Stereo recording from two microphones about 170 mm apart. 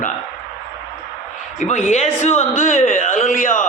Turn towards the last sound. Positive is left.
turn(degrees=50)  # may be behind; listen again after turning